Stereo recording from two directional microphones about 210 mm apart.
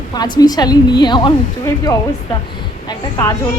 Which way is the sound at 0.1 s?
20° left (ahead or behind).